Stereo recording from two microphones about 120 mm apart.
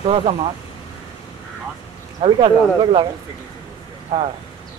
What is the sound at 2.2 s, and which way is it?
Speech, 40° right (ahead or behind).